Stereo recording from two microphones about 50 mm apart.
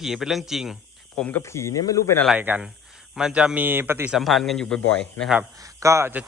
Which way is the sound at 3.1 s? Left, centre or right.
Centre.